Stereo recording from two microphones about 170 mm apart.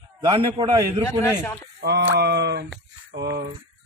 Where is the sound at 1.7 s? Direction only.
80° right.